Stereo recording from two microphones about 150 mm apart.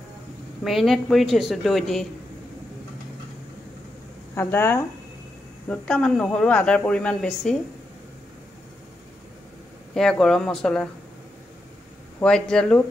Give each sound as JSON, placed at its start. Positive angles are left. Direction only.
{"t": 0.7, "sound": "a woman's voice", "side_deg": 0}
{"t": 4.4, "sound": "a woman's voice", "side_deg": 15}
{"t": 9.9, "sound": "a woman's voice", "side_deg": 5}
{"t": 12.2, "sound": "a woman's voice", "side_deg": 5}